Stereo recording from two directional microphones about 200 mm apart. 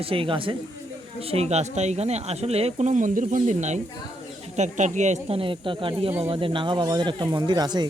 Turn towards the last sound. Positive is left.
turn(degrees=-20)  # may be behind; listen again after turning